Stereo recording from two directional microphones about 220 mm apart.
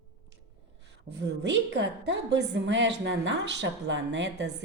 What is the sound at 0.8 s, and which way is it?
A woman's voice, 50° right (ahead or behind).